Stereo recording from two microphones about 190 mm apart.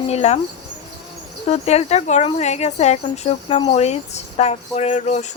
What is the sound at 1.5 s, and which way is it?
Speech, 35° left (ahead or behind).